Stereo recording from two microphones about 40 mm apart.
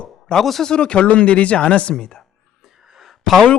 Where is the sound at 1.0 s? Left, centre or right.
Left.